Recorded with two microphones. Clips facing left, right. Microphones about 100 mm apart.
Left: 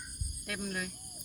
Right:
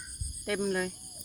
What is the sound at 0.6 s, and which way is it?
Speech, 25° right (ahead or behind).